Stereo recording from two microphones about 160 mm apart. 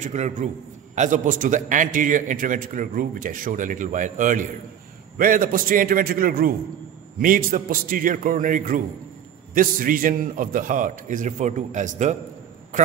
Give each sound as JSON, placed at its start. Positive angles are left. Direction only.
{"t": 0.0, "sound": "a man's voice", "side_deg": -50}